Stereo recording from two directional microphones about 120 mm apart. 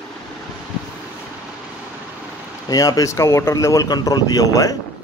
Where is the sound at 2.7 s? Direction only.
30° left (ahead or behind).